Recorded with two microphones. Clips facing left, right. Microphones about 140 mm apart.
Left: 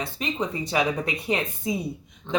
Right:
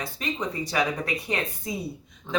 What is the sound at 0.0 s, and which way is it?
Speech, 25° left (ahead or behind).